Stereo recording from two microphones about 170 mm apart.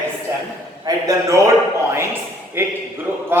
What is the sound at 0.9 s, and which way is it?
A man's voice, 20° right (ahead or behind).